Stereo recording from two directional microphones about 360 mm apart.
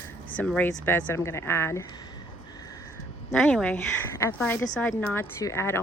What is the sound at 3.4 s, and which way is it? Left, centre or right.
Speech, centre.